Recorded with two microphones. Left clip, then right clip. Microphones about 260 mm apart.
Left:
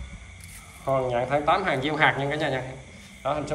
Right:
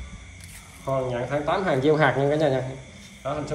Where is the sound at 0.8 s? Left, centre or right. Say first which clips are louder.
Left 2 dB; centre.